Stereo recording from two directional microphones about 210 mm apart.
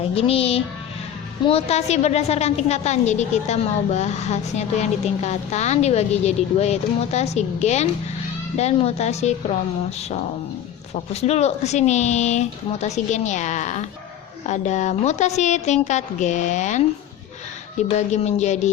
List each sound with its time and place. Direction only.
0.1 s a woman's voice: 30° left (ahead or behind)
11.1 s a woman's voice: 30° left (ahead or behind)